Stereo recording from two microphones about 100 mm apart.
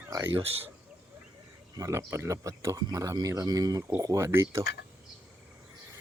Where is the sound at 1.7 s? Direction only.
35° right (ahead or behind).